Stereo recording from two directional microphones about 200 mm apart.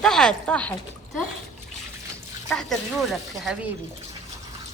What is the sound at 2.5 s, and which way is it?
Speech, centre (ahead or behind).